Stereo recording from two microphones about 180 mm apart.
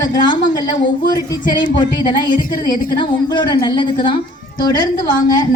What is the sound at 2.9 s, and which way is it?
Speech, 25° left (ahead or behind).